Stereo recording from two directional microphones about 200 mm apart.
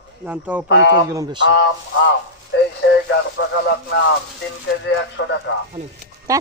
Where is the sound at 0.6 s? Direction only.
65° left (ahead or behind).